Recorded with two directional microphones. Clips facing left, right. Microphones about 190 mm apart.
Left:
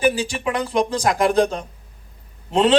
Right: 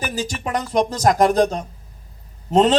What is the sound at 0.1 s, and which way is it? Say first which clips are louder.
A man's voice: left 1 dB; 40° right (ahead or behind).